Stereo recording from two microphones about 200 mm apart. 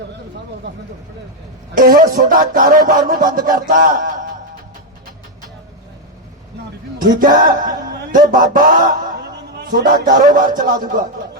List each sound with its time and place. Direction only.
1.7 s a man's voice: 45° right (ahead or behind)
7.0 s a man's voice: 45° right (ahead or behind)